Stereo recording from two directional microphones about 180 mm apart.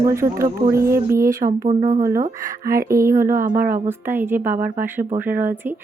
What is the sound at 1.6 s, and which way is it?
Speech, 40° right (ahead or behind).